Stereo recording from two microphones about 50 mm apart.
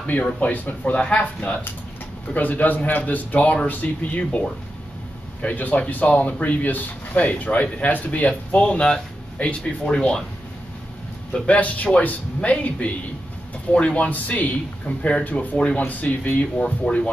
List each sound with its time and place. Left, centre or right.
0.0 s speech: left
5.5 s speech: left
8.8 s speech: centre
11.4 s speech: left